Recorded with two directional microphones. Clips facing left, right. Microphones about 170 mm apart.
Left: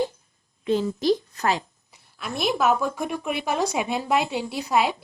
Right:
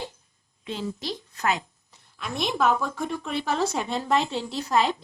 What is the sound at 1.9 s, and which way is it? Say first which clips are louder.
A woman's voice: left 1 dB; 5° left (ahead or behind).